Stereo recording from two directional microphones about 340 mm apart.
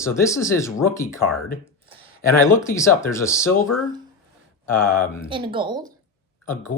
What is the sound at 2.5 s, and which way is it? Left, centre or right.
Speech, centre.